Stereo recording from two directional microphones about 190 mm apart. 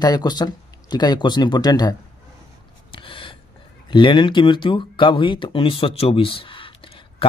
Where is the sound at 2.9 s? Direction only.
25° left (ahead or behind).